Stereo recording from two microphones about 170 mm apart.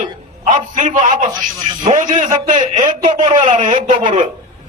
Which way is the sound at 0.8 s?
45° right (ahead or behind).